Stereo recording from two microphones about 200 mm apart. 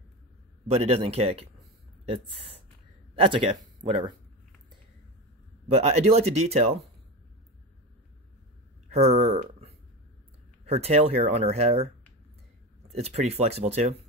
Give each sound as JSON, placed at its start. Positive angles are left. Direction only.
{"t": 0.7, "sound": "speech", "side_deg": -30}
{"t": 5.7, "sound": "speech", "side_deg": -30}
{"t": 8.8, "sound": "speech", "side_deg": -35}